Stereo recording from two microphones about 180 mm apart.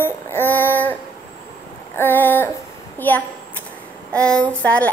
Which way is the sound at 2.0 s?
10° left (ahead or behind).